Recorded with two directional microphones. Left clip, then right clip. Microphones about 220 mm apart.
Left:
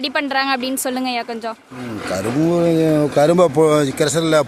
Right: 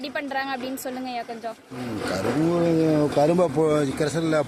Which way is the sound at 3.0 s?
45° left (ahead or behind).